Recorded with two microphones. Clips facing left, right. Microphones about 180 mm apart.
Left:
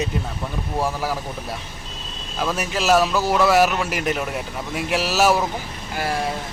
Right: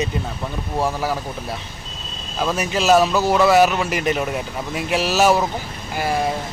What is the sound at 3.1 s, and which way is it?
Speech, 25° right (ahead or behind).